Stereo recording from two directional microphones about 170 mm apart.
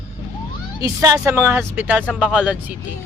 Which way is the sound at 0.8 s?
20° right (ahead or behind).